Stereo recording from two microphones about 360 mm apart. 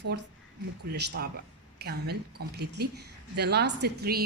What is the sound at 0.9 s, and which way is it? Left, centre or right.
A woman's voice, right.